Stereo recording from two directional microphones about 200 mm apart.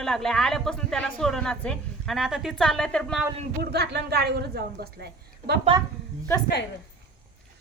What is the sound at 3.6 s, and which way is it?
A woman's voice, 55° right (ahead or behind).